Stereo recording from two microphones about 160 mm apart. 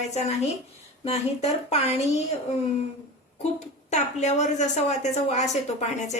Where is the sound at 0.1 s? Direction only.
45° left (ahead or behind).